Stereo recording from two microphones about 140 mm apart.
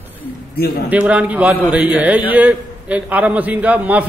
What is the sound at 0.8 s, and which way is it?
A man's voice, 10° right (ahead or behind).